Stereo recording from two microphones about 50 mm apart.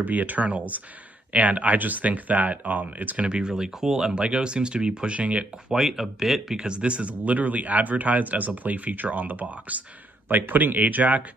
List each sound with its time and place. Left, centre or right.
0.0 s speech: right
3.3 s speech: centre
5.7 s speech: centre; by 11.2 s right